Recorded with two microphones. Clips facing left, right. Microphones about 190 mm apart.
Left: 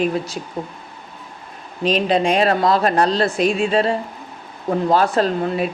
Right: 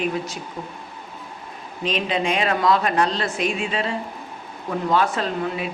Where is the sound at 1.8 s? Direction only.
35° left (ahead or behind).